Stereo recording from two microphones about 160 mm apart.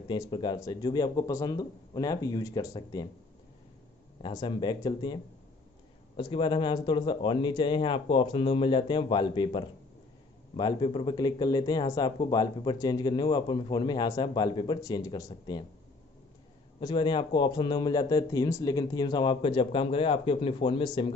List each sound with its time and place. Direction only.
0.1 s speech: 30° left (ahead or behind)
4.2 s a man's voice: 30° left (ahead or behind)
16.8 s speech: 30° left (ahead or behind)